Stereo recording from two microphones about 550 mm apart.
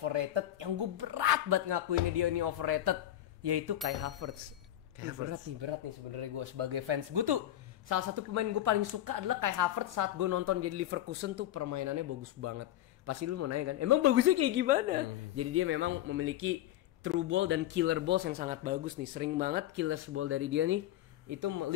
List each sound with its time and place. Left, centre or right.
0.0 s speech: right
4.2 s speech: right
5.5 s speech: right
6.1 s speech: right
7.9 s speech: right
11.6 s speech: right
21.3 s speech: right